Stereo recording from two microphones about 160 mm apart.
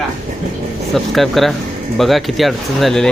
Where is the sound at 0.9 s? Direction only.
Centre (ahead or behind).